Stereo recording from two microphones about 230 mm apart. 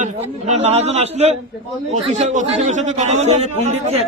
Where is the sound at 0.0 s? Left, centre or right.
Right.